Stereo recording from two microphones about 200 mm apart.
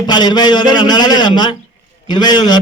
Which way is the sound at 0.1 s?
20° left (ahead or behind).